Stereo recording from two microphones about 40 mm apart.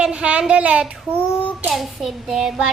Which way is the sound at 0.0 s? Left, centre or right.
Right.